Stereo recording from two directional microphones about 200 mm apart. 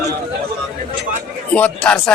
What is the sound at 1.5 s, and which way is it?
Speech, 5° left (ahead or behind).